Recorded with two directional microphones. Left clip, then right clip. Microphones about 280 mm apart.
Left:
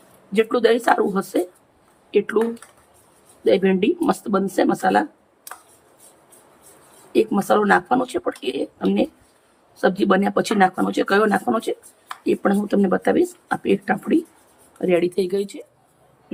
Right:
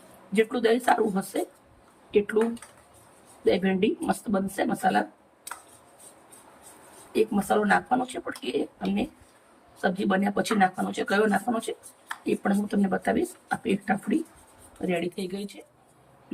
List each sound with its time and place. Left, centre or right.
0.3 s speech: centre
3.4 s speech: centre
7.1 s speech: centre
9.8 s speech: centre